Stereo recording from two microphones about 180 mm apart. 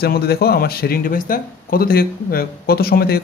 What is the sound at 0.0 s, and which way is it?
Speech, 60° left (ahead or behind).